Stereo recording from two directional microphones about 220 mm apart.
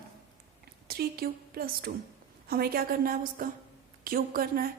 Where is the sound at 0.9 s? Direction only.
45° right (ahead or behind).